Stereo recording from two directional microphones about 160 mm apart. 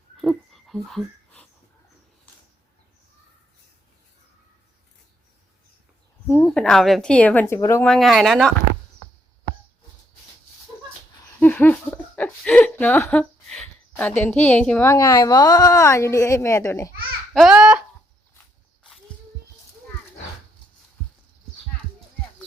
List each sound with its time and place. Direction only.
0.2 s a sound: centre (ahead or behind)
6.2 s a woman's voice: 10° left (ahead or behind)
7.9 s speech: centre (ahead or behind)
11.2 s a woman's voice: 15° left (ahead or behind)
17.3 s speech: 5° right (ahead or behind)